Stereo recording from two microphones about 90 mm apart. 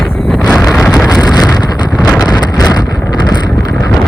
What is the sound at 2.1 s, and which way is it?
Wind noise, 45° left (ahead or behind).